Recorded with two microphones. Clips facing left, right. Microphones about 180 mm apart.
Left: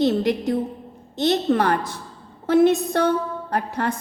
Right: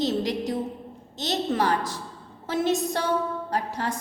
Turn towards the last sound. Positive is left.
turn(degrees=60)  # may be behind; listen again after turning